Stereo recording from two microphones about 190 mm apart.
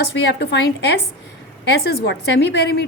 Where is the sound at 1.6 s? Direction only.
60° left (ahead or behind).